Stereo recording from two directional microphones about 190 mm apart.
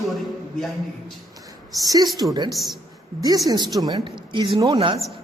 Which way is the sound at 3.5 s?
20° right (ahead or behind).